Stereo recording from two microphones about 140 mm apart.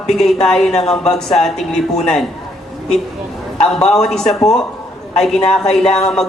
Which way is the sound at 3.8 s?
5° left (ahead or behind).